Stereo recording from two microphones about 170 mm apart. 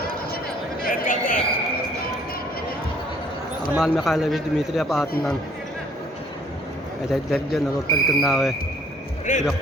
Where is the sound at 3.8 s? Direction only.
Centre (ahead or behind).